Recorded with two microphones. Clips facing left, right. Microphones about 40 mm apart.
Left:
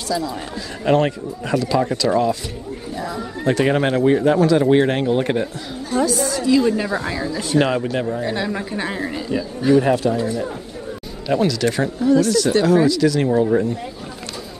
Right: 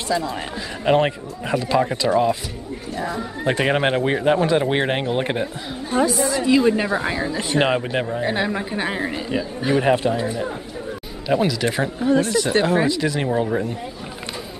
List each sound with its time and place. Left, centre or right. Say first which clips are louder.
0.1 s a woman's voice: even; right
12.1 s a woman's voice: left 3 dB; right